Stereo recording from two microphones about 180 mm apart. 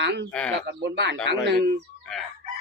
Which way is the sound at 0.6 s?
75° right (ahead or behind).